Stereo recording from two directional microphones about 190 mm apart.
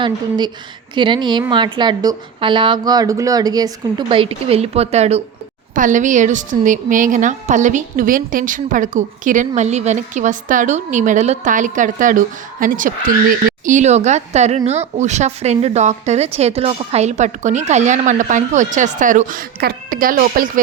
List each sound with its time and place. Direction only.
0.0 s a woman's voice: 25° right (ahead or behind); by 20.5 s 45° right (ahead or behind)